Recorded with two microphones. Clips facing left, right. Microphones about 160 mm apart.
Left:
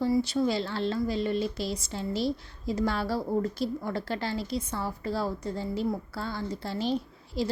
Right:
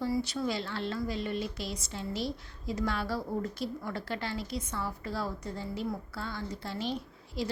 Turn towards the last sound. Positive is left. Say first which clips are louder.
# left 5 dB
turn(degrees=30)  # may be behind; listen again after turning